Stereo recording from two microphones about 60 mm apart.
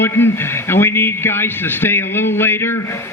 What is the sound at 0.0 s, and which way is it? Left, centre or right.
A man's voice, left.